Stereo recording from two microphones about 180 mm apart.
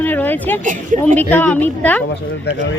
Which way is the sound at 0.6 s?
45° right (ahead or behind).